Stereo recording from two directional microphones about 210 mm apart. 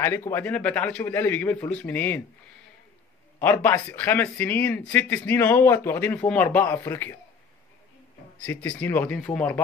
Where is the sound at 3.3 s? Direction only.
10° left (ahead or behind).